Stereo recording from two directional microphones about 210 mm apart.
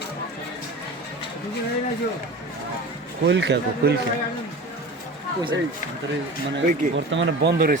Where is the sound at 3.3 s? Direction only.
55° right (ahead or behind).